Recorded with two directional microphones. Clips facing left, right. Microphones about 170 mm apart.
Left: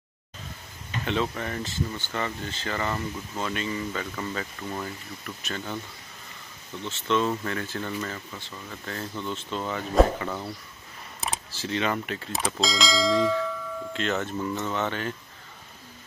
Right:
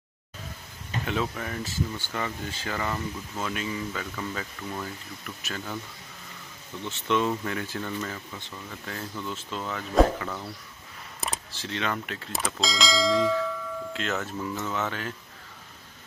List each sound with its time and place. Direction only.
1.0 s speech: 5° right (ahead or behind)
6.8 s speech: 15° right (ahead or behind)